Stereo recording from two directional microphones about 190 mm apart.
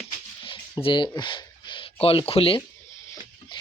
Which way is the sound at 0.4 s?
25° left (ahead or behind).